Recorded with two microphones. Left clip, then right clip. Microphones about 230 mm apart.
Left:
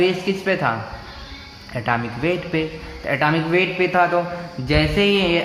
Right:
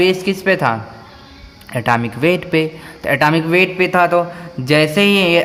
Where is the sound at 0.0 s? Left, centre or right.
Right.